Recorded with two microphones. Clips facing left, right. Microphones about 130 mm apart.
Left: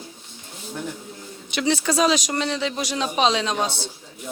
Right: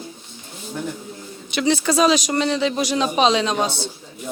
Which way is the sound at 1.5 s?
15° right (ahead or behind).